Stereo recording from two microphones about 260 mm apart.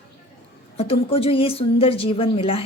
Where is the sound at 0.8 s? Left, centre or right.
Left.